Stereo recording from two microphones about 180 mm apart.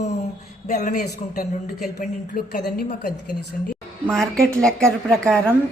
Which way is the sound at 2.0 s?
45° left (ahead or behind).